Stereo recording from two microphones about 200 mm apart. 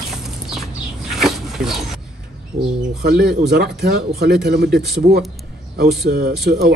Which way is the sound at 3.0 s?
50° right (ahead or behind).